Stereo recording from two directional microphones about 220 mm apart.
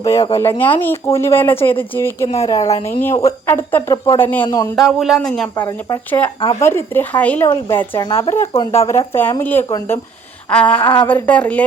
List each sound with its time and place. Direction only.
0.3 s a woman's voice: 10° left (ahead or behind)
4.8 s a woman's voice: centre (ahead or behind); by 8.9 s 25° left (ahead or behind)
9.1 s a woman's voice: 10° left (ahead or behind)
10.8 s a sound: 20° left (ahead or behind)
11.1 s a woman's voice: 5° left (ahead or behind)